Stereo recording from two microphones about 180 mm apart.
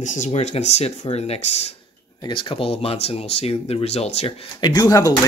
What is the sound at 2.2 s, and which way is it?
Speech, 25° left (ahead or behind).